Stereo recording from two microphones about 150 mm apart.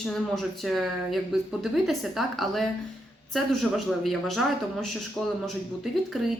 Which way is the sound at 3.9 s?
Centre (ahead or behind).